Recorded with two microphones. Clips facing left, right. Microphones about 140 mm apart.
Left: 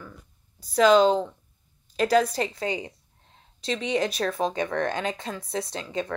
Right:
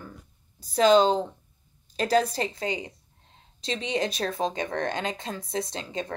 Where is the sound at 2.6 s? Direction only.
45° left (ahead or behind).